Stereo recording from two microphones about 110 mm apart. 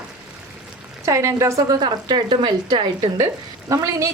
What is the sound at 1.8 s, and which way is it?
Speech, 40° right (ahead or behind).